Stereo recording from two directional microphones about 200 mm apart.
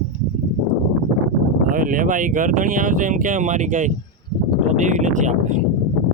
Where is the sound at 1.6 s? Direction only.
45° right (ahead or behind).